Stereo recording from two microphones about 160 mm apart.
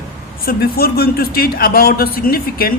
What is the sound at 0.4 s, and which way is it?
A woman's voice, 75° left (ahead or behind).